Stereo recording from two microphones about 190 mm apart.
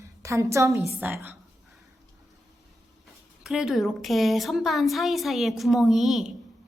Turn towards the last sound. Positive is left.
turn(degrees=0)  # may be behind; listen again after turning